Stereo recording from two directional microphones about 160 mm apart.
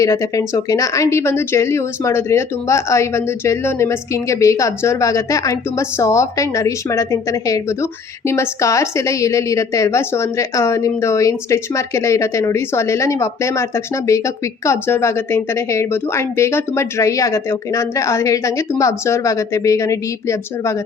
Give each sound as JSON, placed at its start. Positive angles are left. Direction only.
{"t": 0.0, "sound": "a woman's voice", "side_deg": 20}